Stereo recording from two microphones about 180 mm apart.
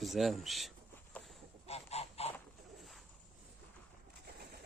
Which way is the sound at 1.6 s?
35° left (ahead or behind).